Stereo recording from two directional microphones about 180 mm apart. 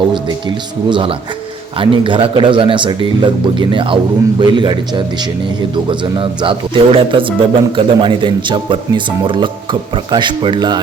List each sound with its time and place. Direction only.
0.1 s speech: 25° right (ahead or behind)